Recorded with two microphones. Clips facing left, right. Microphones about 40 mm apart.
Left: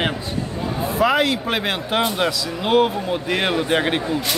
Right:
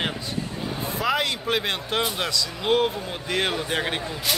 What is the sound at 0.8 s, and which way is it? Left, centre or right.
A man's voice, centre.